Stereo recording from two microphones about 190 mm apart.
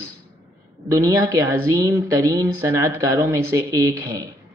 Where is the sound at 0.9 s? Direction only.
20° right (ahead or behind).